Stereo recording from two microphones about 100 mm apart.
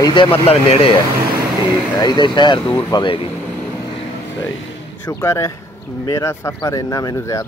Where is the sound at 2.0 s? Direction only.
45° left (ahead or behind).